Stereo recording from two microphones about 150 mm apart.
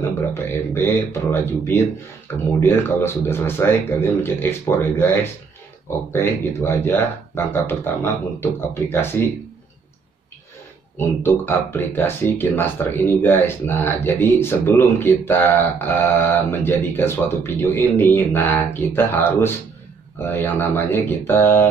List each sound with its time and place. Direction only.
0.3 s speech: 15° left (ahead or behind)
11.0 s speech: 15° left (ahead or behind)